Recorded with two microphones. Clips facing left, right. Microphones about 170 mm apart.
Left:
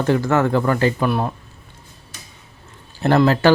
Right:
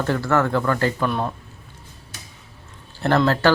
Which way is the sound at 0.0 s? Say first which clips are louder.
Left 3 dB; 15° left (ahead or behind).